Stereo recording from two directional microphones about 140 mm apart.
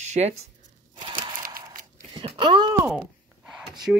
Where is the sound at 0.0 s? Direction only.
55° right (ahead or behind).